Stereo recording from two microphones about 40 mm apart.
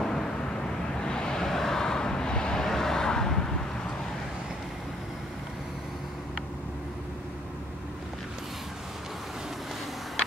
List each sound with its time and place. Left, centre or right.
0.0 s vehicle: centre